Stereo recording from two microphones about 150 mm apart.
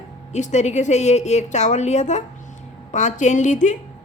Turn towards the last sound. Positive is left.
turn(degrees=55)  # may be behind; listen again after turning